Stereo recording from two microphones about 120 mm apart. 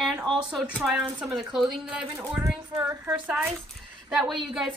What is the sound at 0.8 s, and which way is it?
Speech, 5° right (ahead or behind).